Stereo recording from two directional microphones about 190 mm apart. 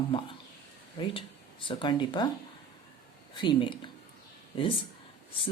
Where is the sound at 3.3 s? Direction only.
25° left (ahead or behind).